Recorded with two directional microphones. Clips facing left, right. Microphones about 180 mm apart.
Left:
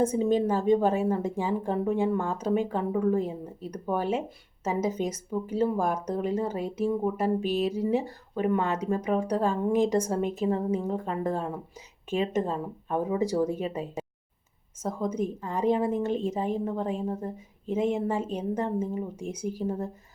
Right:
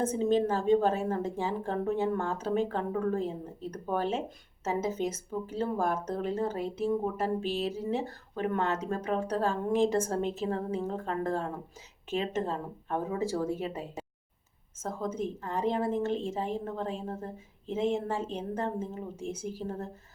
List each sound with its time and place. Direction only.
0.0 s speech: 15° left (ahead or behind)